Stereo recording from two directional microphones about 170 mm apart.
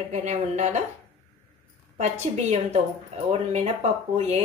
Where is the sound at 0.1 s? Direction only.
45° right (ahead or behind).